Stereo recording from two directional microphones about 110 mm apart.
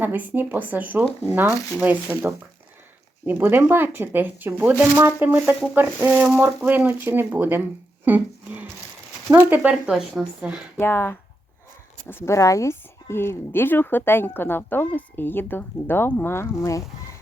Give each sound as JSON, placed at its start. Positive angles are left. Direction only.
{"t": 0.0, "sound": "speech", "side_deg": -15}
{"t": 3.2, "sound": "speech", "side_deg": -20}
{"t": 9.9, "sound": "a woman's voice", "side_deg": -5}
{"t": 10.8, "sound": "speech", "side_deg": 20}